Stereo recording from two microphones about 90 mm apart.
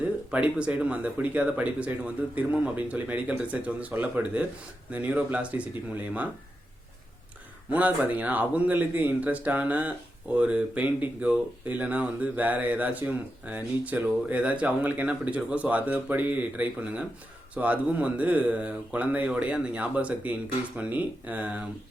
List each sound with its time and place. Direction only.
0.0 s speech: 15° right (ahead or behind)
7.7 s speech: 15° right (ahead or behind)